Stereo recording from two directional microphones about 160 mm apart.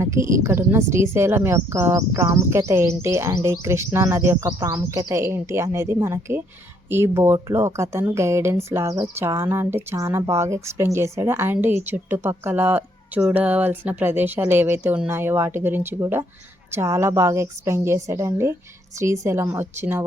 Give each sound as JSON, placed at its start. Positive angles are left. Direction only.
{"t": 0.0, "sound": "speech", "side_deg": -20}